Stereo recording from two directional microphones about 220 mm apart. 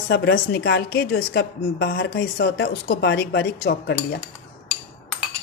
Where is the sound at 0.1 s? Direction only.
50° left (ahead or behind).